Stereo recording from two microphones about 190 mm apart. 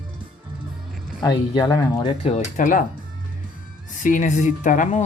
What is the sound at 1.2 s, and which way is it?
Speech, 20° left (ahead or behind).